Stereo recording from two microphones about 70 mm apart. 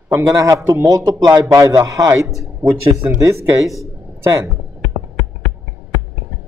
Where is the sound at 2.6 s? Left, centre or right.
Right.